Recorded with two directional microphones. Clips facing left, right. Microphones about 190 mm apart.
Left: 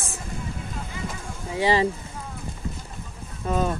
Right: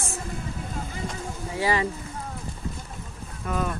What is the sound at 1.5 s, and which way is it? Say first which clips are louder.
Speech: left 4 dB; 25° left (ahead or behind).